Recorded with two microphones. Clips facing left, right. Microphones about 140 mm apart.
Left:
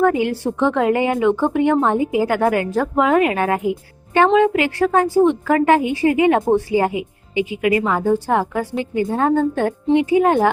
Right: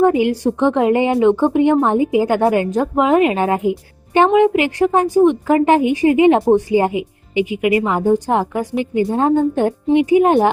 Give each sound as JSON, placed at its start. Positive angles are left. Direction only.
{"t": 0.0, "sound": "a woman's voice", "side_deg": -15}